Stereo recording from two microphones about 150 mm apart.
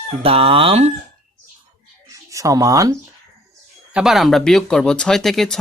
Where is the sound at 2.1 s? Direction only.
20° right (ahead or behind).